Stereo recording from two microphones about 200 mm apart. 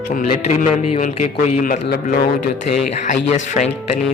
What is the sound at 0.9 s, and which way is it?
Speech, 35° left (ahead or behind).